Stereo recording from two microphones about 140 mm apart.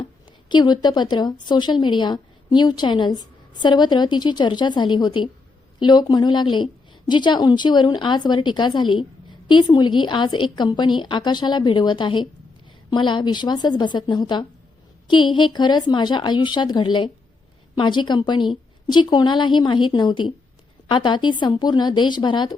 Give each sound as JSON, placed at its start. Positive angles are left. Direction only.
{"t": 0.5, "sound": "a woman's voice", "side_deg": 30}